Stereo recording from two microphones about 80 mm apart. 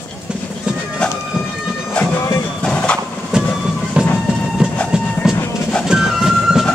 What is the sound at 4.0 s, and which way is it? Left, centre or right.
Music, centre.